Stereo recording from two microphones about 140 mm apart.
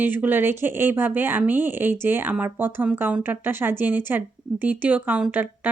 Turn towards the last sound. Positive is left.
turn(degrees=-10)  # may be behind; listen again after turning